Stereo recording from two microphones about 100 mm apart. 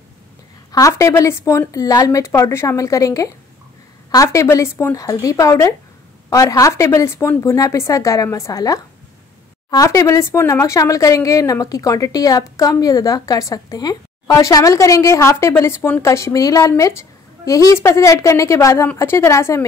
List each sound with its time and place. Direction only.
0.7 s a woman's voice: 35° left (ahead or behind)